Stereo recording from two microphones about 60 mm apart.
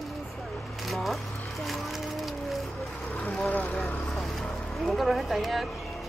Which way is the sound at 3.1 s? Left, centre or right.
Left.